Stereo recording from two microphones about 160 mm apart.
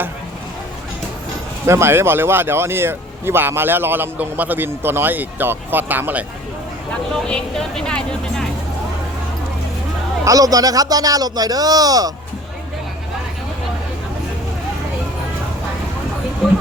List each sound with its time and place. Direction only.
1.6 s speech: 15° right (ahead or behind)
7.1 s speech: 5° left (ahead or behind)
10.2 s speech: 20° right (ahead or behind)